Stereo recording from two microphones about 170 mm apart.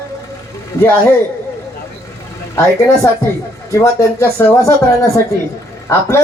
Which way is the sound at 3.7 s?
15° left (ahead or behind).